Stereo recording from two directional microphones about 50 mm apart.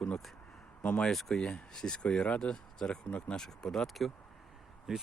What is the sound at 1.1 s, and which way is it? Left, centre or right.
Speech, centre.